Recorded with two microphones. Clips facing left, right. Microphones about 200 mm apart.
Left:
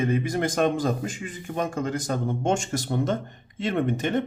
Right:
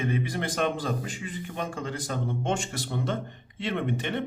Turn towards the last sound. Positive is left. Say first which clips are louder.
# left 5 dB
turn(degrees=45)  # may be behind; listen again after turning